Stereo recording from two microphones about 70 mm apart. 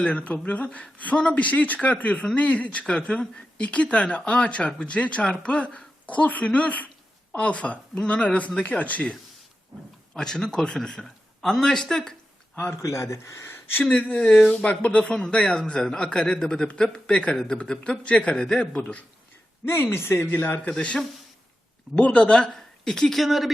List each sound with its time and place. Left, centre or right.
0.0 s speech: centre
10.2 s speech: centre
12.7 s speech: left
13.8 s speech: centre
19.6 s speech: left
20.7 s speech: centre